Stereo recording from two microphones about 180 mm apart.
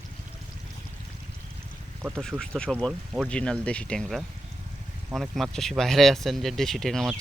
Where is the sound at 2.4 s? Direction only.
5° left (ahead or behind).